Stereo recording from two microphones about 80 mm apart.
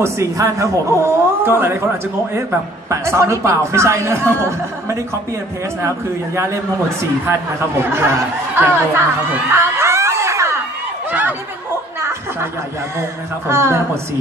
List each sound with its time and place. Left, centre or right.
0.0 s speech: right
1.4 s speech: right
2.9 s speech: right
9.3 s a sound: right
11.1 s a sound: right
12.0 s chuckle: right
13.5 s speech: right